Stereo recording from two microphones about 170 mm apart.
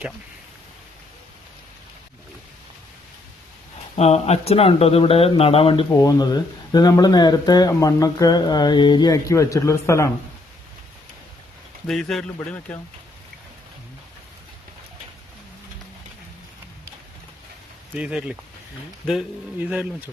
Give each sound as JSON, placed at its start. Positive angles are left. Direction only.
{"t": 3.9, "sound": "speech", "side_deg": 40}
{"t": 5.9, "sound": "speech", "side_deg": 20}
{"t": 11.9, "sound": "a man's voice", "side_deg": 0}
{"t": 17.9, "sound": "speech", "side_deg": -5}